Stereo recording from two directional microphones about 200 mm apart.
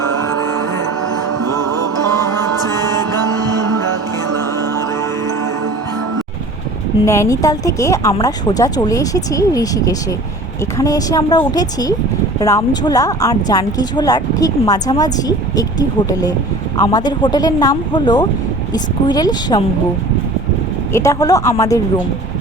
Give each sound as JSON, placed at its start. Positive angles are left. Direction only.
{"t": 0.3, "sound": "music", "side_deg": 15}
{"t": 7.0, "sound": "speech", "side_deg": 15}
{"t": 20.9, "sound": "speech", "side_deg": 15}